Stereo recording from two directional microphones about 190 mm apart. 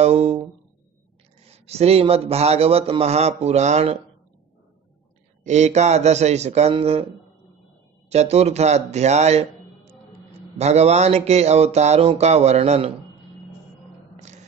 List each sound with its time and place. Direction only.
0.0 s a sound: 35° right (ahead or behind)
1.4 s speech: 35° right (ahead or behind)
5.4 s speech: 35° right (ahead or behind)
8.1 s speech: 35° right (ahead or behind)